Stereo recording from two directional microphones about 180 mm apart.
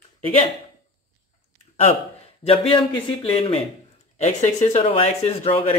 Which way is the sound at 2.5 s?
30° left (ahead or behind).